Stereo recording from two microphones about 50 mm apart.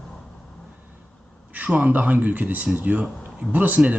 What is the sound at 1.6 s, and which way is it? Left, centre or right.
A man's voice, right.